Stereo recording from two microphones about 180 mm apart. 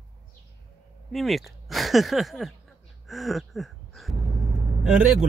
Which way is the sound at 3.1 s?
Centre (ahead or behind).